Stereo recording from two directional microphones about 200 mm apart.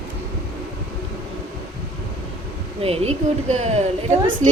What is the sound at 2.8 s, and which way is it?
A woman's voice, 30° right (ahead or behind).